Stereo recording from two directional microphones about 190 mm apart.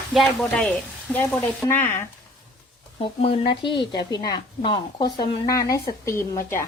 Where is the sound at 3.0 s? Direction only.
30° left (ahead or behind); by 6.7 s 15° left (ahead or behind).